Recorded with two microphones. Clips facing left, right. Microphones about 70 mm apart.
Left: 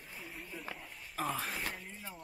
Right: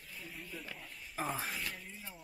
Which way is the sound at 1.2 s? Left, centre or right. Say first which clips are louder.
Left 1 dB; centre.